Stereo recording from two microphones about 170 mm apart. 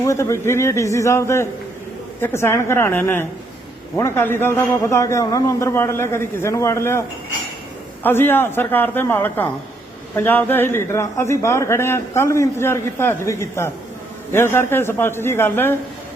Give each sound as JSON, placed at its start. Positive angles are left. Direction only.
{"t": 0.0, "sound": "a man's voice", "side_deg": 15}
{"t": 8.0, "sound": "a man's voice", "side_deg": 10}